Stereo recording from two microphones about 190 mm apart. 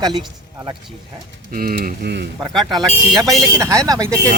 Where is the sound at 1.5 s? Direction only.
50° right (ahead or behind).